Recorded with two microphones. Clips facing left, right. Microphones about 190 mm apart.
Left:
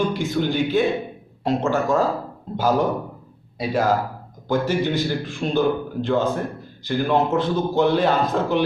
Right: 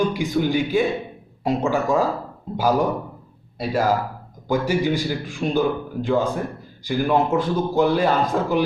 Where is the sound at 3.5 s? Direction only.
5° right (ahead or behind).